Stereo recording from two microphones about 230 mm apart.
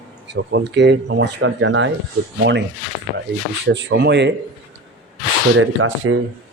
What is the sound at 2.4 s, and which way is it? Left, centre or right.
Speech, right.